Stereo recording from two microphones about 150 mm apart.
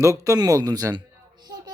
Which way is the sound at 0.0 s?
20° right (ahead or behind).